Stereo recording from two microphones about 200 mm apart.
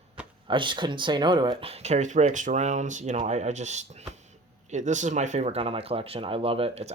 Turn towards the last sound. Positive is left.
turn(degrees=-30)  # may be behind; listen again after turning